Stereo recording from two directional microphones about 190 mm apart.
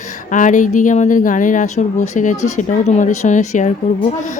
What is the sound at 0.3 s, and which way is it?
A child's voice, 40° left (ahead or behind).